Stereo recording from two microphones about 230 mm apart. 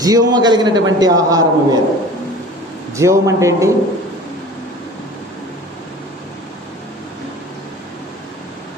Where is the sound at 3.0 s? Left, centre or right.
Centre.